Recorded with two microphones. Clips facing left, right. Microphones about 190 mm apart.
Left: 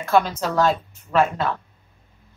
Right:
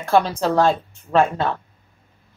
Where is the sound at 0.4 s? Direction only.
30° right (ahead or behind).